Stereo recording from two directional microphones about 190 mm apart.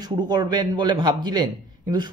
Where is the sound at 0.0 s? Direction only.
20° right (ahead or behind).